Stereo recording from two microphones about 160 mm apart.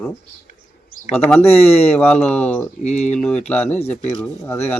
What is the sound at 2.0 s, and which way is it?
Speech, 5° left (ahead or behind).